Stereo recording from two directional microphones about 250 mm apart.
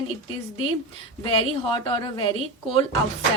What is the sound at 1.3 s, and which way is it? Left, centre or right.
A woman's voice, left.